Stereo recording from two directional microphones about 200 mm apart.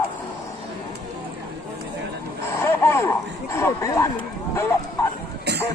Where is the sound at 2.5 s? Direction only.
15° left (ahead or behind).